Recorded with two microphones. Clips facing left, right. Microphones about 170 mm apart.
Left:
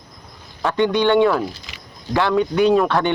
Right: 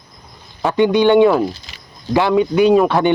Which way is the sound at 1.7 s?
30° right (ahead or behind).